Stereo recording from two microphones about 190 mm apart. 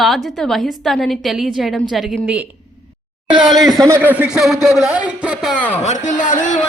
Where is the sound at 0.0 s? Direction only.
Centre (ahead or behind).